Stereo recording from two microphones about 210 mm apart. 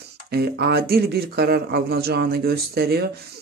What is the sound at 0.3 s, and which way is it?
Speech, 50° right (ahead or behind).